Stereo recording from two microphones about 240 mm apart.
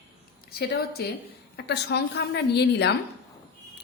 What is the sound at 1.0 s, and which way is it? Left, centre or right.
A woman's voice, left.